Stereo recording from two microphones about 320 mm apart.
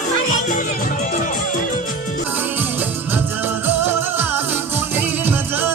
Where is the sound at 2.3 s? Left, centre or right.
Centre.